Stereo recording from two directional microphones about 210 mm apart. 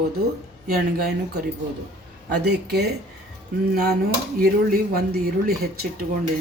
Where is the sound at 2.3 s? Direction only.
50° right (ahead or behind).